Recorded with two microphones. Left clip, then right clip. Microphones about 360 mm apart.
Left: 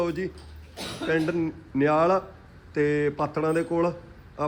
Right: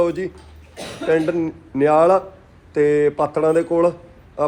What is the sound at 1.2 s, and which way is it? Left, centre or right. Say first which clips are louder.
Speech: right 6 dB; right.